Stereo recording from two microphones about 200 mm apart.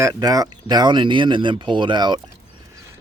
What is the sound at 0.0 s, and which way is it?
Speech, 20° right (ahead or behind).